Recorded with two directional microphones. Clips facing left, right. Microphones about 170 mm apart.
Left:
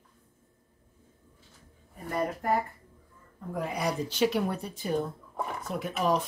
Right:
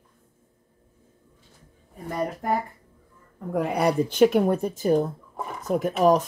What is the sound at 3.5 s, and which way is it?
Speech, 65° right (ahead or behind).